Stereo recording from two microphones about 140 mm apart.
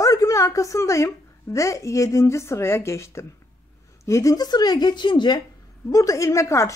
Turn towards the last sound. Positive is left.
turn(degrees=20)  # may be behind; listen again after turning